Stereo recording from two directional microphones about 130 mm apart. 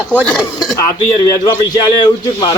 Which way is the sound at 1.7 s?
30° left (ahead or behind).